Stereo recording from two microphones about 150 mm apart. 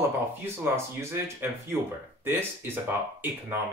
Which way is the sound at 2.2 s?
15° right (ahead or behind).